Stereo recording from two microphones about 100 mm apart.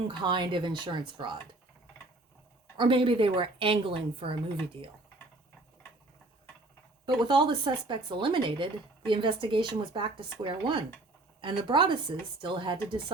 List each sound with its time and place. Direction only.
0.1 s speech: 55° right (ahead or behind)
2.7 s speech: 55° right (ahead or behind)
7.0 s speech: 50° right (ahead or behind)